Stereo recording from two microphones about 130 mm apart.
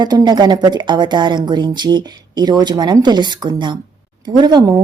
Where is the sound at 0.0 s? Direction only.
30° right (ahead or behind).